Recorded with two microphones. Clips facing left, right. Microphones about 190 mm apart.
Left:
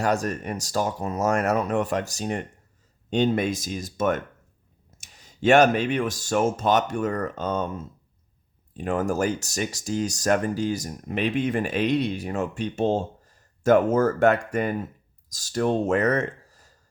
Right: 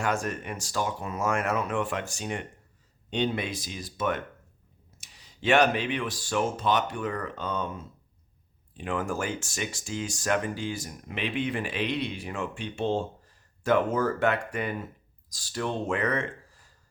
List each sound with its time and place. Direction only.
0.0 s speech: 40° left (ahead or behind)
8.8 s speech: 40° left (ahead or behind)